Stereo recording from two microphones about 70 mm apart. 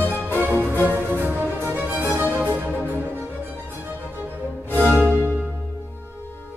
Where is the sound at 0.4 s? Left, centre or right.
Right.